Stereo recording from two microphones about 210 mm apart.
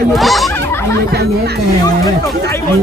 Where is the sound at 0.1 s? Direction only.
Centre (ahead or behind).